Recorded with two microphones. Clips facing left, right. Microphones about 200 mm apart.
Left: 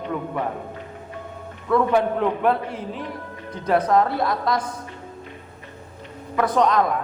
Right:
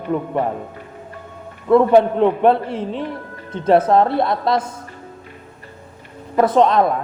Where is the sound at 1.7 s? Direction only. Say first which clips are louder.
Right 7 dB; 30° right (ahead or behind).